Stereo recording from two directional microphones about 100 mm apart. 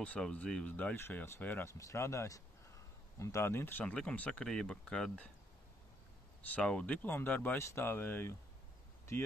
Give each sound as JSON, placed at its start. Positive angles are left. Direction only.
{"t": 0.0, "sound": "speech", "side_deg": 10}
{"t": 3.8, "sound": "speech", "side_deg": 10}
{"t": 6.5, "sound": "speech", "side_deg": 10}